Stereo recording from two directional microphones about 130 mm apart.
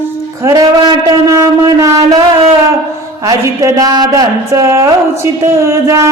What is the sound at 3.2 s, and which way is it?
Speech, 25° right (ahead or behind).